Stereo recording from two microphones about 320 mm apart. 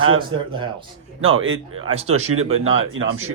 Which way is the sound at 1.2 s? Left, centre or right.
Right.